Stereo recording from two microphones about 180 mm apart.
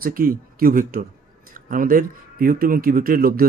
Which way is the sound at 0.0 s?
55° right (ahead or behind).